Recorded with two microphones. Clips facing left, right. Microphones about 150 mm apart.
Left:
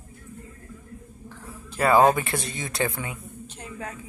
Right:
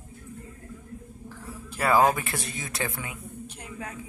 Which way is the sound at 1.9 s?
25° left (ahead or behind).